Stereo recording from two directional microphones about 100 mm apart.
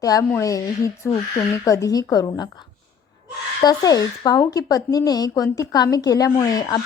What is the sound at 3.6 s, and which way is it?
Speech, 40° left (ahead or behind).